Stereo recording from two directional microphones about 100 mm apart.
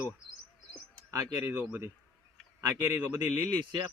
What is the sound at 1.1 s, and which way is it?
Speech, 35° right (ahead or behind).